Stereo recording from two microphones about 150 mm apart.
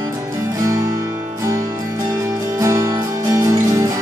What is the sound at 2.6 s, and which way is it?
Music, 20° right (ahead or behind).